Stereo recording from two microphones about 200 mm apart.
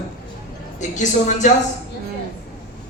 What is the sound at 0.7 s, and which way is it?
Speech, 35° left (ahead or behind).